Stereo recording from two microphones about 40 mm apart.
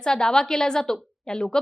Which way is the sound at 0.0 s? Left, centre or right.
Centre.